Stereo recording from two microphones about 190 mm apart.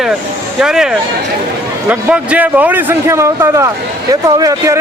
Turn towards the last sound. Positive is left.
turn(degrees=-15)  # may be behind; listen again after turning